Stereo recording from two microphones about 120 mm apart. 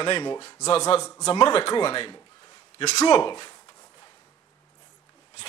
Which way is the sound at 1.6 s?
45° left (ahead or behind).